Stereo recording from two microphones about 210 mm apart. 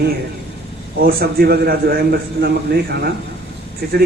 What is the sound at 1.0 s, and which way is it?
A man's voice, 45° right (ahead or behind).